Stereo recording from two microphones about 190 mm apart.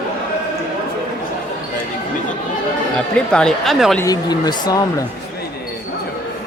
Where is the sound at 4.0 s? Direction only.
20° left (ahead or behind).